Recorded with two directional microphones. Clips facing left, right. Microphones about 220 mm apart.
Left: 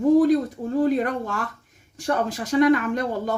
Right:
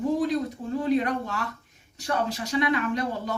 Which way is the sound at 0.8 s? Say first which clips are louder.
Left 3 dB; 45° left (ahead or behind).